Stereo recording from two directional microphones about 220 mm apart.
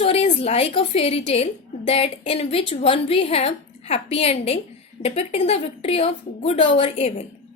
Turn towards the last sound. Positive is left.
turn(degrees=30)  # may be behind; listen again after turning